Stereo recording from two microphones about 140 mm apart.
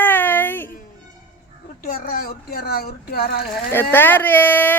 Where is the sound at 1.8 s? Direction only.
90° left.